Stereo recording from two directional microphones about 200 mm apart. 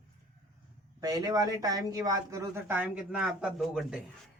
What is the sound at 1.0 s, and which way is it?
Speech, 20° right (ahead or behind).